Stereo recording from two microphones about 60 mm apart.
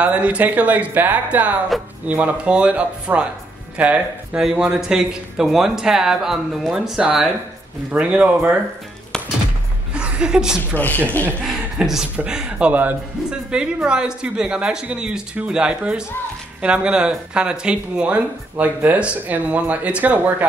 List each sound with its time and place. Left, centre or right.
0.0 s speech: right
4.4 s speech: centre
9.9 s a sound: centre
10.7 s speech: left
11.4 s speech: centre; by 20.4 s right